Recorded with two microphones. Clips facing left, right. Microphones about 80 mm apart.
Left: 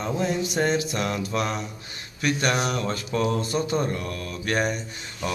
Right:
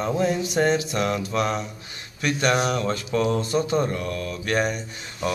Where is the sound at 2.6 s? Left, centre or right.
Centre.